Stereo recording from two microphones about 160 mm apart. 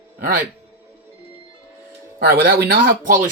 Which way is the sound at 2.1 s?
70° right (ahead or behind).